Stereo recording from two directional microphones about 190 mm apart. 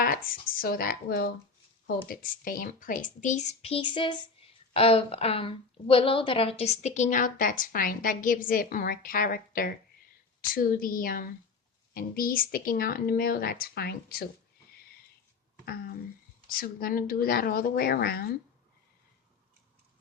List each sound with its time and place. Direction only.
0.3 s a woman's voice: 50° left (ahead or behind)
15.6 s a woman's voice: 55° left (ahead or behind)